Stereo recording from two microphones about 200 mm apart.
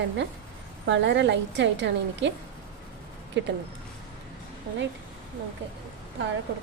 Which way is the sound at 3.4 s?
65° right (ahead or behind).